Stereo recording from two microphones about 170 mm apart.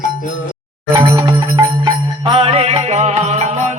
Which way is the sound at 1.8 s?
30° right (ahead or behind).